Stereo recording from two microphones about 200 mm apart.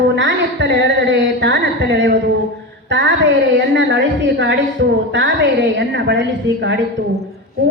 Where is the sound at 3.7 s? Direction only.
65° right (ahead or behind).